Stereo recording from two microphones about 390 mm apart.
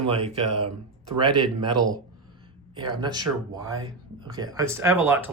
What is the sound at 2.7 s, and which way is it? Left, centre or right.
Speech, centre.